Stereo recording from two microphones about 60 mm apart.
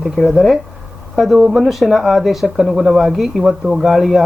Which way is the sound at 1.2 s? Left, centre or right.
Centre.